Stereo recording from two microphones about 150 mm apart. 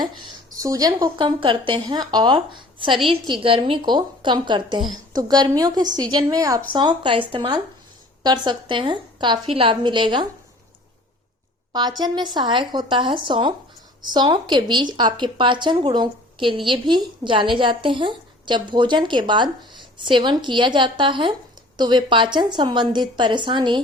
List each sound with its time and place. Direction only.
0.0 s a woman's voice: 25° right (ahead or behind)
11.7 s a woman's voice: 25° right (ahead or behind)